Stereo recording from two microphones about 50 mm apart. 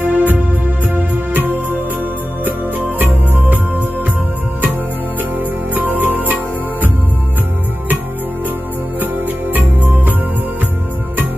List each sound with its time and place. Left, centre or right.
0.0 s music: right
5.8 s music: right
9.0 s music: right